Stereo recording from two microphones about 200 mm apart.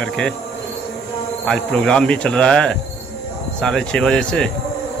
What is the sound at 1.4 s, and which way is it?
Speech, 5° left (ahead or behind).